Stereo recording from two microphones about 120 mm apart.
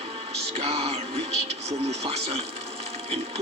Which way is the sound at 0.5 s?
55° right (ahead or behind).